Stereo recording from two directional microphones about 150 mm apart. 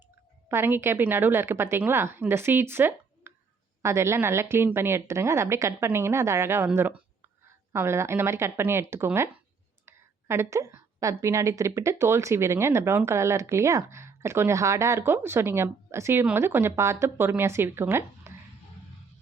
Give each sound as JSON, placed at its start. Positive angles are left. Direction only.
{"t": 0.4, "sound": "a woman's voice", "side_deg": -15}